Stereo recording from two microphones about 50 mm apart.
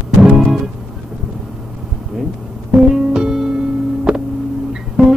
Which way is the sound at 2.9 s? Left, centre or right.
Centre.